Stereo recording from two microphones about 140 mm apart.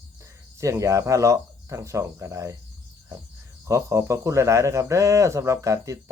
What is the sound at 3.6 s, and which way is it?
Speech, 25° right (ahead or behind).